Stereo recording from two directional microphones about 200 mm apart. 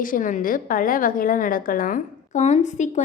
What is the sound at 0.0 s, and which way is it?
A woman's voice, 40° left (ahead or behind).